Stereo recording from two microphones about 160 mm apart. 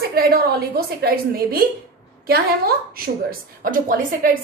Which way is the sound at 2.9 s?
65° right (ahead or behind).